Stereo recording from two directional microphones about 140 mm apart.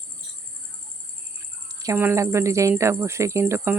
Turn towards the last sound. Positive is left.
turn(degrees=-20)  # may be behind; listen again after turning